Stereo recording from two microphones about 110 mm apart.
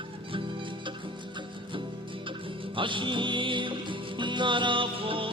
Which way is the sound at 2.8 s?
50° right (ahead or behind).